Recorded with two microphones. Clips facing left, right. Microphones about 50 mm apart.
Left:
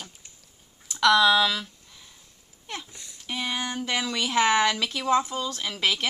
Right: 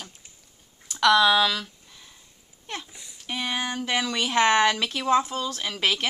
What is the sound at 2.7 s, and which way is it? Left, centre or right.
A woman's voice, centre.